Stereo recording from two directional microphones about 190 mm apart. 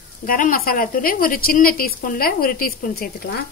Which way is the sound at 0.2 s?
50° left (ahead or behind).